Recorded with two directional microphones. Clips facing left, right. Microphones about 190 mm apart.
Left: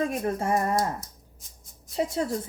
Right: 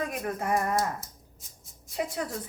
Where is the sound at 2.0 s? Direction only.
25° left (ahead or behind).